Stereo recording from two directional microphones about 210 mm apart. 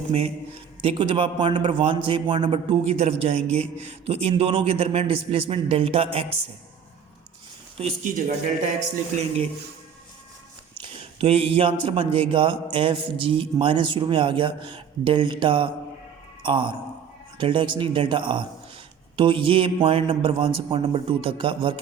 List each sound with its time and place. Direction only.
0.1 s a man's voice: 25° right (ahead or behind)
7.8 s speech: 35° right (ahead or behind)
10.8 s a man's voice: 25° right (ahead or behind)